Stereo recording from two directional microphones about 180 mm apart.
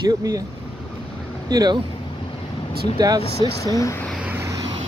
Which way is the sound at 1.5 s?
20° right (ahead or behind).